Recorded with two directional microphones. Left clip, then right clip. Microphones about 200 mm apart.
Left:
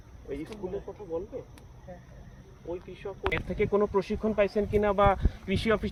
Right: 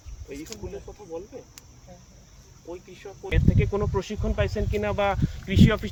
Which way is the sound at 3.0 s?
50° right (ahead or behind).